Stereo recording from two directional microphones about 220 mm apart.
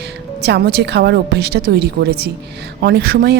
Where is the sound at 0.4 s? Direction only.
50° right (ahead or behind).